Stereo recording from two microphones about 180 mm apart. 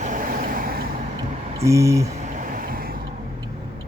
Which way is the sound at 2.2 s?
45° right (ahead or behind).